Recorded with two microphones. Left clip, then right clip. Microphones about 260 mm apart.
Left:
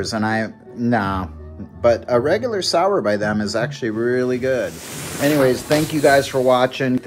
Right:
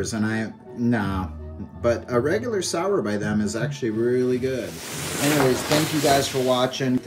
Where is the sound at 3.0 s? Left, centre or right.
Centre.